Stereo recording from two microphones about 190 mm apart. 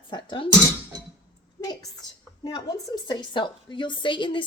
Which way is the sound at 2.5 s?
25° left (ahead or behind).